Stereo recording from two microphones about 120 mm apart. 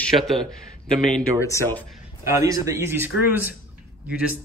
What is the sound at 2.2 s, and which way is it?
Speech, 25° right (ahead or behind).